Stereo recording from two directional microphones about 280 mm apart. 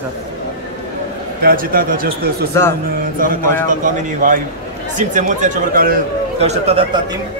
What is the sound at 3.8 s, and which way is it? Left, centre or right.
A man's voice, right.